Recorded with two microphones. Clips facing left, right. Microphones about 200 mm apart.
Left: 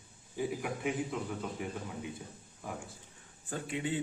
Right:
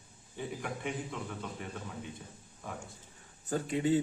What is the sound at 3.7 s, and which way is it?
Speech, 40° right (ahead or behind).